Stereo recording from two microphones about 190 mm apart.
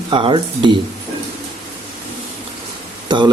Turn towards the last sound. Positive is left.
turn(degrees=-25)  # may be behind; listen again after turning